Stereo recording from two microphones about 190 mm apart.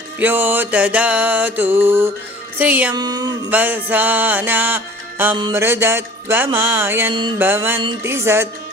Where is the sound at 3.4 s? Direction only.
10° right (ahead or behind).